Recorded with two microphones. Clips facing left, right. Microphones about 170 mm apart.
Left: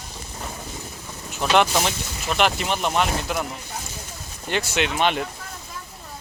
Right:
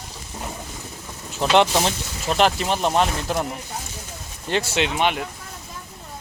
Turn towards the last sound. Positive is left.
turn(degrees=-10)  # may be behind; listen again after turning